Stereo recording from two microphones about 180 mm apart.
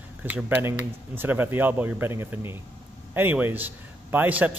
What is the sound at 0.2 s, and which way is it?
Speech, 10° right (ahead or behind).